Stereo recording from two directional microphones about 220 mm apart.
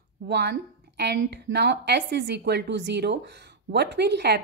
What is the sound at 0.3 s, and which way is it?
A woman's voice, 50° right (ahead or behind).